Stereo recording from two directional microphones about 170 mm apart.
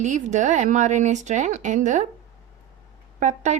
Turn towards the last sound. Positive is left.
turn(degrees=-45)  # may be behind; listen again after turning